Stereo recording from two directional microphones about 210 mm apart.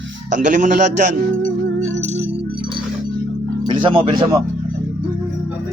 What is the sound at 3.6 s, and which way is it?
Speech, 20° right (ahead or behind).